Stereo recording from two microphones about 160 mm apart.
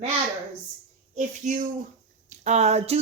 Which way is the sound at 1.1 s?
50° right (ahead or behind).